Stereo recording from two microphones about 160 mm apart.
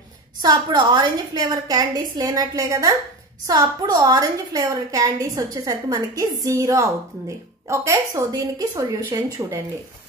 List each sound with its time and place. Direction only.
0.4 s a woman's voice: 25° right (ahead or behind)